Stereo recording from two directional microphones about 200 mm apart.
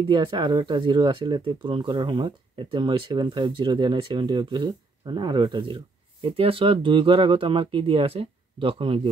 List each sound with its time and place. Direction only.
0.1 s speech: 20° right (ahead or behind)